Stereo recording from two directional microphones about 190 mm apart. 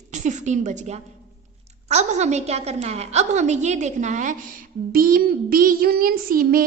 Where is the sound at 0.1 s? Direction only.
40° right (ahead or behind).